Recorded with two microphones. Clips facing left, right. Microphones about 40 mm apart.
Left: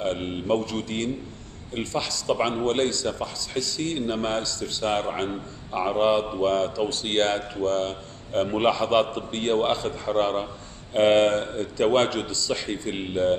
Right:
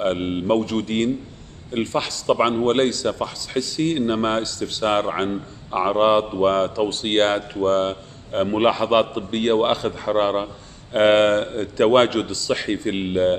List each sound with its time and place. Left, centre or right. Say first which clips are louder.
0.0 s a man's voice: right 5 dB; right
6.9 s a man's voice: right 4 dB; right